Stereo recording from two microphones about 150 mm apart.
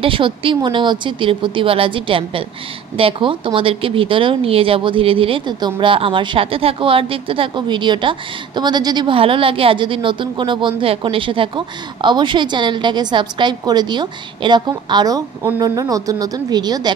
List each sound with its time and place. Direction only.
0.0 s speech: 35° right (ahead or behind)